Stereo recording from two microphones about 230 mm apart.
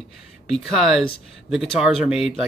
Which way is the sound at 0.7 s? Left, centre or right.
Centre.